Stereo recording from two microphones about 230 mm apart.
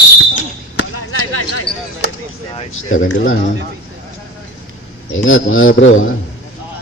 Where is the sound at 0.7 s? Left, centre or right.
Left.